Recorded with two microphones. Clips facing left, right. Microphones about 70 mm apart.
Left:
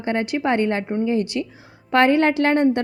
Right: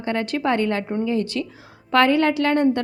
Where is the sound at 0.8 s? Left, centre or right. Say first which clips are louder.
Left 1 dB; centre.